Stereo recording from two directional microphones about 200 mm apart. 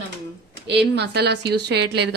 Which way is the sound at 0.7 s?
55° right (ahead or behind).